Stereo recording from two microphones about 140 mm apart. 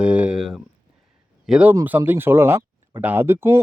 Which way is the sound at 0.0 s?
10° right (ahead or behind).